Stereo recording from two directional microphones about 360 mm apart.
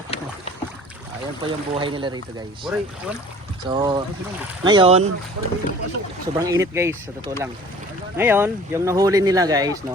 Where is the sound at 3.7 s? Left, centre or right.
Centre.